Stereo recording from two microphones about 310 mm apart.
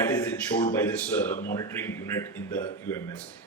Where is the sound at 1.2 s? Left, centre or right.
Centre.